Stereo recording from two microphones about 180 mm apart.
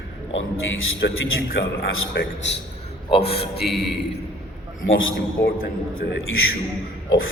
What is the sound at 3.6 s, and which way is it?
Speech, centre (ahead or behind).